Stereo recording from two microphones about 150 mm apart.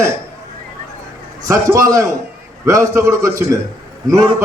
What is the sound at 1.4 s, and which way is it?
A man's voice, 20° right (ahead or behind).